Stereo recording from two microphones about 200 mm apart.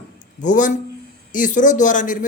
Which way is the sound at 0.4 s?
40° left (ahead or behind).